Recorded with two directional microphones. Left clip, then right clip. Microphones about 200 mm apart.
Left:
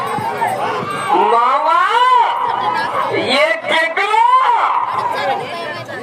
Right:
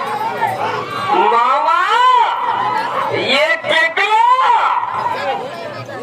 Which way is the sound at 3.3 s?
15° right (ahead or behind).